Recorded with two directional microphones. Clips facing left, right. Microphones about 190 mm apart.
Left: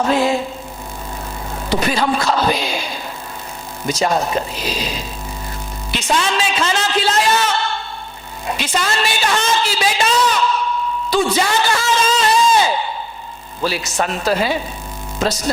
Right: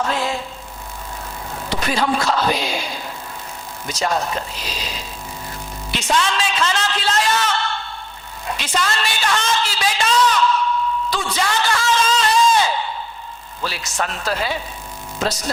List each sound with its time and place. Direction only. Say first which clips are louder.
0.0 s speech: left 6 dB; 10° left (ahead or behind)
1.7 s speech: left 3 dB; 10° left (ahead or behind)
3.8 s speech: left 4 dB; 10° left (ahead or behind)
6.1 s a man's voice: left 1 dB; 5° left (ahead or behind)
8.4 s music: left 2 dB; 10° left (ahead or behind)
13.6 s speech: left 5 dB; 10° left (ahead or behind)